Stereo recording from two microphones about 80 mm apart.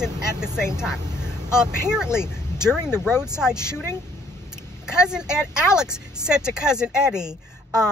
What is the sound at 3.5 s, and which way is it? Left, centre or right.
Speech, left.